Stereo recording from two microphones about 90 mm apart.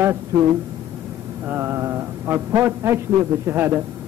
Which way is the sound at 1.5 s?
30° right (ahead or behind).